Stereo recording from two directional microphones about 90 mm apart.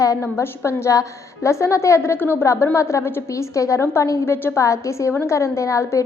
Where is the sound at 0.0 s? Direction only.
35° left (ahead or behind).